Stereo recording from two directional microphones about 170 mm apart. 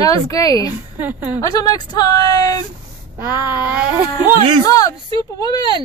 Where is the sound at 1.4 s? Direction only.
20° left (ahead or behind).